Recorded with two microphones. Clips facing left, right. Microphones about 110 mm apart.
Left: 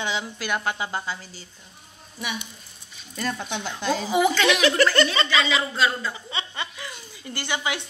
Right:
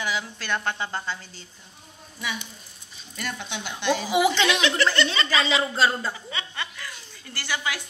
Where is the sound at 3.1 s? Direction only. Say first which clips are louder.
Left 4 dB; 35° left (ahead or behind).